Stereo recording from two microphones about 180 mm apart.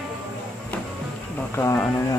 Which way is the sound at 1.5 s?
15° left (ahead or behind).